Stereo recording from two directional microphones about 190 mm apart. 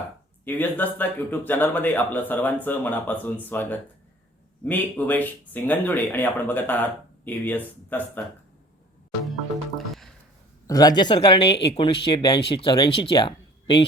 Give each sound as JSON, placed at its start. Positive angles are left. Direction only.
{"t": 0.4, "sound": "speech", "side_deg": 10}
{"t": 9.7, "sound": "music", "side_deg": 0}
{"t": 10.7, "sound": "speech", "side_deg": 20}